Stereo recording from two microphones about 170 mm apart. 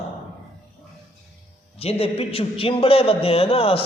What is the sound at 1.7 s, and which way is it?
A man's voice, 35° left (ahead or behind).